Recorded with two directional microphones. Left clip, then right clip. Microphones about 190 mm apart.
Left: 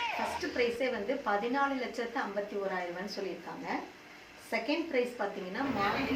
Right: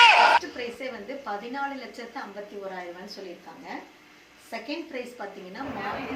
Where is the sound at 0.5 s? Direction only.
Centre (ahead or behind).